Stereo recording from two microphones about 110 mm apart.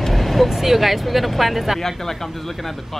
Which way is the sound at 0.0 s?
Centre (ahead or behind).